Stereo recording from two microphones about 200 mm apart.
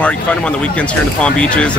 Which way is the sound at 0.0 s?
5° left (ahead or behind).